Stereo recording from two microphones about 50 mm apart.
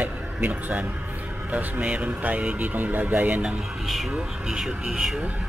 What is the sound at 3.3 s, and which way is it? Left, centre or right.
Speech, centre.